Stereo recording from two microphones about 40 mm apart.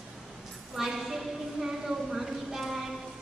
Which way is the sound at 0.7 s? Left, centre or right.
Centre.